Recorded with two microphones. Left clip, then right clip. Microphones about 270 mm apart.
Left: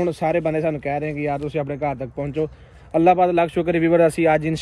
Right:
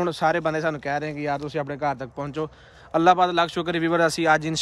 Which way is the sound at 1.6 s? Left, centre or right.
Right.